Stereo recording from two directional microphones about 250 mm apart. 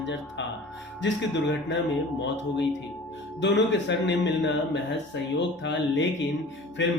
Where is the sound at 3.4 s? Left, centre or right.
Left.